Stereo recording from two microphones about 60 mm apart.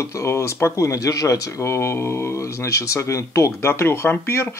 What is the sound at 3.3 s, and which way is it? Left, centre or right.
Speech, left.